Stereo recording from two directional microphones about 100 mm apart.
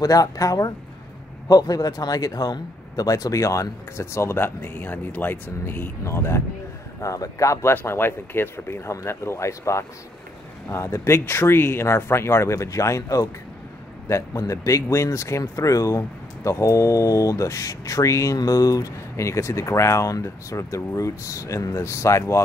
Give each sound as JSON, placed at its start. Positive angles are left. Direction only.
{"t": 0.0, "sound": "speech", "side_deg": 35}